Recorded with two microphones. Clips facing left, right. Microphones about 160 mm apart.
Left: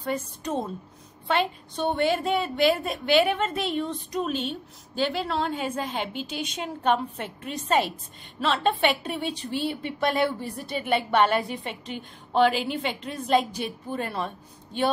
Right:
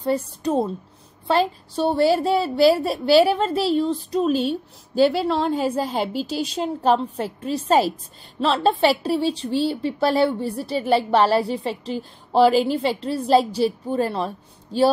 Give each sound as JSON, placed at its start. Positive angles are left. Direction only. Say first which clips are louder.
{"t": 0.0, "sound": "a woman's voice", "louder": "right 7 dB", "side_deg": -35}